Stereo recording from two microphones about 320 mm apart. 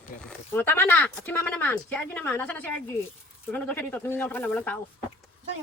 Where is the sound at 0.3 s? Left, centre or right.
Centre.